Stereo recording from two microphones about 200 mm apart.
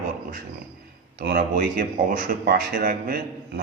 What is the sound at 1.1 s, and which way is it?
Speech, 55° right (ahead or behind).